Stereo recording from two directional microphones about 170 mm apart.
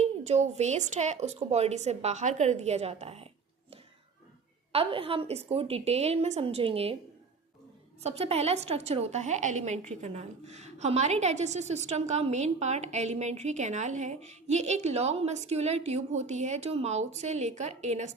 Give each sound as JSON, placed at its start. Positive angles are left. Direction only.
{"t": 0.0, "sound": "a woman's voice", "side_deg": -40}
{"t": 4.7, "sound": "a woman's voice", "side_deg": -35}
{"t": 8.0, "sound": "a woman's voice", "side_deg": -35}